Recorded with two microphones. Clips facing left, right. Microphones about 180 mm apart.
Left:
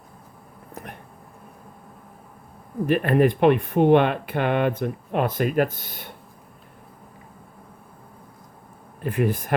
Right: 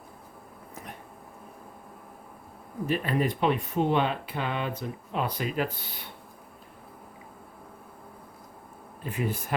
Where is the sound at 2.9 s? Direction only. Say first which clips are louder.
Left 8 dB; 60° left (ahead or behind).